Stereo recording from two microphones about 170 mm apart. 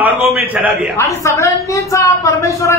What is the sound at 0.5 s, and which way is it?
Speech, 10° right (ahead or behind).